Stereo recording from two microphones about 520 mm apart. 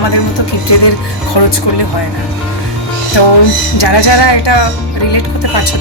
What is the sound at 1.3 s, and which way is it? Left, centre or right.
Speech, left.